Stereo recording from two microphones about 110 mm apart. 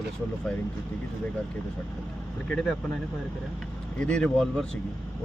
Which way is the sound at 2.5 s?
10° left (ahead or behind).